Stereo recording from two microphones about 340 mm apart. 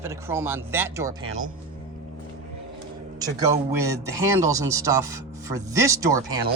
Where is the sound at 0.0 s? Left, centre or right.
Centre.